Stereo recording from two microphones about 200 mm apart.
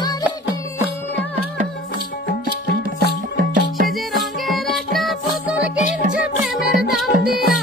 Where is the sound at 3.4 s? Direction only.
45° right (ahead or behind).